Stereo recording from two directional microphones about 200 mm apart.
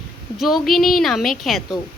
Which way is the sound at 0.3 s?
Centre (ahead or behind).